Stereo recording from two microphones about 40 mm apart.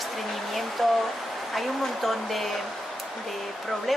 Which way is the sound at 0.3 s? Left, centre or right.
Centre.